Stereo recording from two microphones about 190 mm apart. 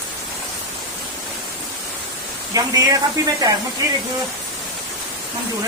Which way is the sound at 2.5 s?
20° right (ahead or behind).